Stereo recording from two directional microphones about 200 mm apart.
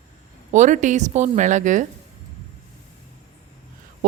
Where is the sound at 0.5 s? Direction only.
40° right (ahead or behind).